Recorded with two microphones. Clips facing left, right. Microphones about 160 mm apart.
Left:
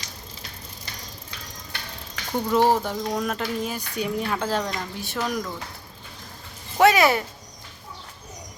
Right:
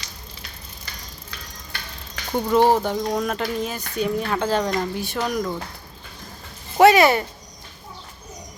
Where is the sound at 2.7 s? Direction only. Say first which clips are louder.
Right 3 dB; centre (ahead or behind).